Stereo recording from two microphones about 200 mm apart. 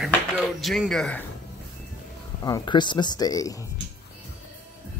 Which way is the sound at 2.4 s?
20° left (ahead or behind).